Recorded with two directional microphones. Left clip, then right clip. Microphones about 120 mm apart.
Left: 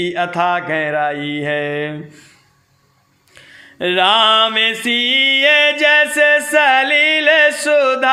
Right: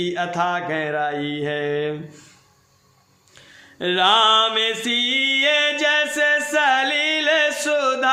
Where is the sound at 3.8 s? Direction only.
30° left (ahead or behind).